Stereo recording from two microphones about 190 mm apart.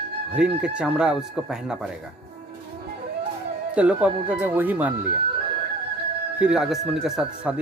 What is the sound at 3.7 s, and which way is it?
Speech, 5° right (ahead or behind).